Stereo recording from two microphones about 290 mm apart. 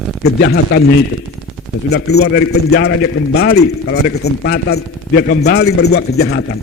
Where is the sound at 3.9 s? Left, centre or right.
Left.